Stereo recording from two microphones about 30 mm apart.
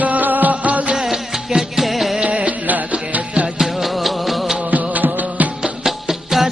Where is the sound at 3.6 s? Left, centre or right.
Centre.